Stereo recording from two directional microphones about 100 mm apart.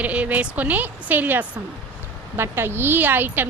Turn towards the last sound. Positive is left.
turn(degrees=-20)  # may be behind; listen again after turning